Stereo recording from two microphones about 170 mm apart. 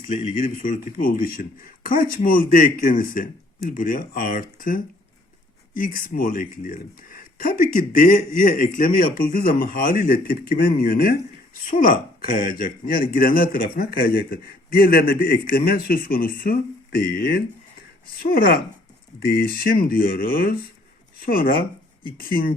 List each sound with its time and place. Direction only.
0.1 s speech: 50° left (ahead or behind)